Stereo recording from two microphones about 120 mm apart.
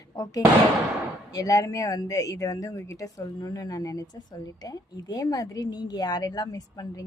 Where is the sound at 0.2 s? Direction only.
30° left (ahead or behind).